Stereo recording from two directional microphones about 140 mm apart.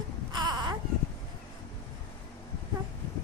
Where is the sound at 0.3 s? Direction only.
30° right (ahead or behind).